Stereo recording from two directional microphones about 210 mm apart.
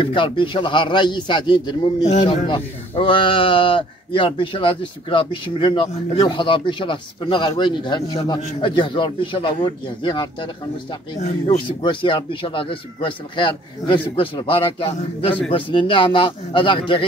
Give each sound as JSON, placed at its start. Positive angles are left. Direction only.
{"t": 0.0, "sound": "speech", "side_deg": 25}